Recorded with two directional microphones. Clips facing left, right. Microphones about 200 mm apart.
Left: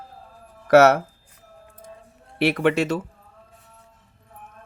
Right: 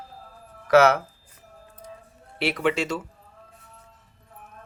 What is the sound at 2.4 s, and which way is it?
Speech, 60° left (ahead or behind).